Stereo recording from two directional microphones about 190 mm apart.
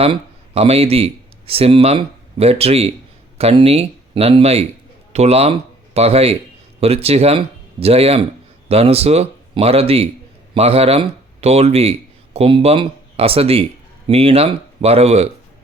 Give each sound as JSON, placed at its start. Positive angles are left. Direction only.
{"t": 0.0, "sound": "speech", "side_deg": -30}